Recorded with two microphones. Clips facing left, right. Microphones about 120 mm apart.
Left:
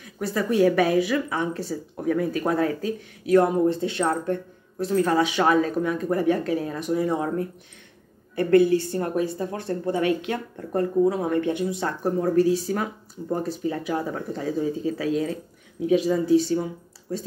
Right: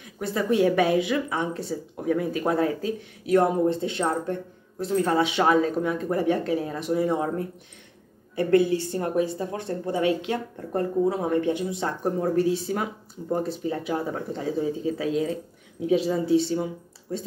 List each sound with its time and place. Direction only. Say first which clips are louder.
0.2 s speech: left 1 dB; 25° right (ahead or behind)